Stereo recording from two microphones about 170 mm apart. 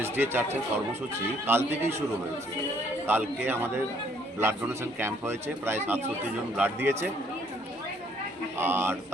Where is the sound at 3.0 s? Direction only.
10° right (ahead or behind).